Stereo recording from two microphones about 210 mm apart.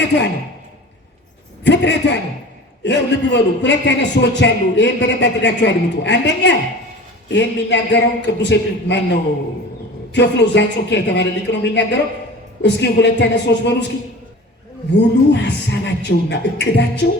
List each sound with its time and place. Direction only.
1.6 s a man's voice: 55° left (ahead or behind)
14.9 s a man's voice: 55° left (ahead or behind)